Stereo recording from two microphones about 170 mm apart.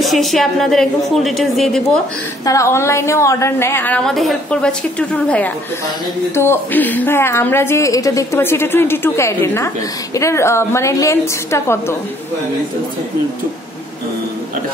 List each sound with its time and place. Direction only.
0.0 s a woman's voice: centre (ahead or behind)
2.4 s a woman's voice: 20° left (ahead or behind)